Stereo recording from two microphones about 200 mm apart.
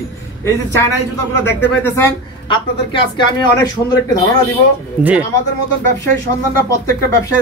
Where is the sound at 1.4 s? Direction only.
60° left (ahead or behind).